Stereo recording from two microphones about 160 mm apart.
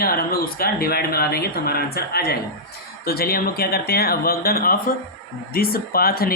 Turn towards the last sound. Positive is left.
turn(degrees=70)  # may be behind; listen again after turning